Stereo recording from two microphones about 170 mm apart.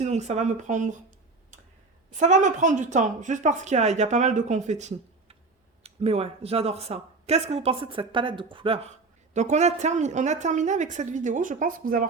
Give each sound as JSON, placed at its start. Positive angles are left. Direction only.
{"t": 0.0, "sound": "a woman's voice", "side_deg": -40}
{"t": 2.0, "sound": "a woman's voice", "side_deg": -45}